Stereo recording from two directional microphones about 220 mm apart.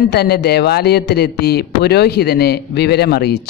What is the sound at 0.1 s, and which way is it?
Speech, 45° left (ahead or behind).